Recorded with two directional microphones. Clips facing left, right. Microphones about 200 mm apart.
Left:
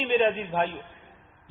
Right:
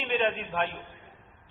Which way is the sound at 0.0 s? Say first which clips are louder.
Left 5 dB; 30° left (ahead or behind).